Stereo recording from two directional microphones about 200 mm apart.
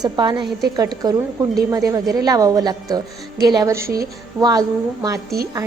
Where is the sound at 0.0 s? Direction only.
20° right (ahead or behind).